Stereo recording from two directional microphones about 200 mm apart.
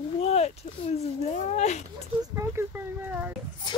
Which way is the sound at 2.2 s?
15° right (ahead or behind).